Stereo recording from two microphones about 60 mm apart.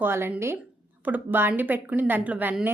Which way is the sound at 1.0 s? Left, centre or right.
Right.